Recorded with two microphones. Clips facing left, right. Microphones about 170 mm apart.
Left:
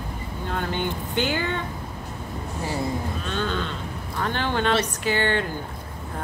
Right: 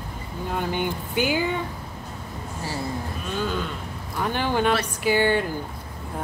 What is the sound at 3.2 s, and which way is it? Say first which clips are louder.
Speech: right 3 dB; 10° right (ahead or behind).